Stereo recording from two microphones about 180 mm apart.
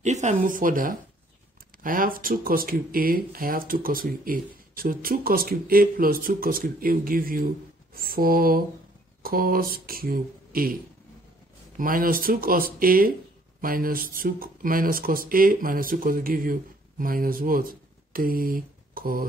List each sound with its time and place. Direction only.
0.0 s speech: 40° right (ahead or behind)